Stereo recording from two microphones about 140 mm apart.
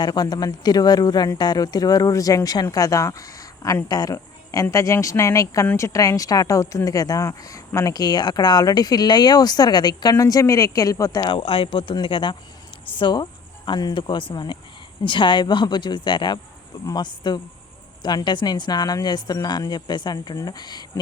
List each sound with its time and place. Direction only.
0.0 s speech: 30° left (ahead or behind)
11.3 s speech: 40° left (ahead or behind)